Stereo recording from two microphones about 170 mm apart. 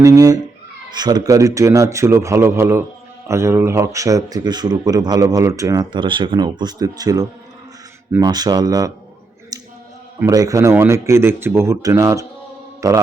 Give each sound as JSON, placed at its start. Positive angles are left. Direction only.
{"t": 0.0, "sound": "speech", "side_deg": -20}
{"t": 10.2, "sound": "speech", "side_deg": -20}